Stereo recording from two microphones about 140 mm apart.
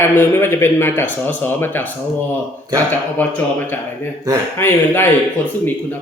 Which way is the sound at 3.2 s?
10° left (ahead or behind).